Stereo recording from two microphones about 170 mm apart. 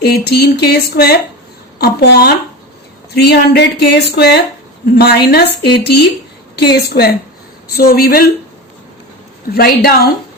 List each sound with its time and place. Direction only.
0.0 s a sound: 70° left (ahead or behind)
7.8 s a woman's voice: 60° left (ahead or behind)
9.5 s a woman's voice: 65° left (ahead or behind)